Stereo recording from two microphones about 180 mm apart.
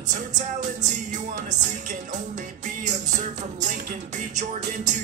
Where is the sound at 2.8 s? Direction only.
40° right (ahead or behind).